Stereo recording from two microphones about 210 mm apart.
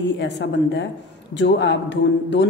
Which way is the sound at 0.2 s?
55° left (ahead or behind).